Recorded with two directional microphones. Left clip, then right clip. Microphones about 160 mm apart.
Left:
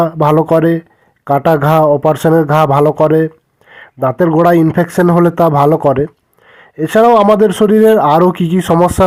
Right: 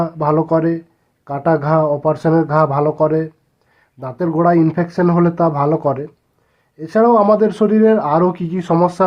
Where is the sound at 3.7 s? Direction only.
30° left (ahead or behind).